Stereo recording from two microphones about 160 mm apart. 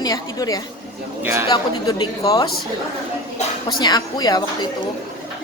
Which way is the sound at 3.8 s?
25° left (ahead or behind).